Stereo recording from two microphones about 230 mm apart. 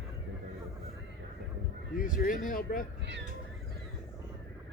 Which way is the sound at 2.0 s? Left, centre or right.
Left.